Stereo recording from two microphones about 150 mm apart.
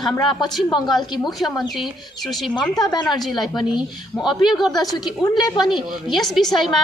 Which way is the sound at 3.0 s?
Centre (ahead or behind).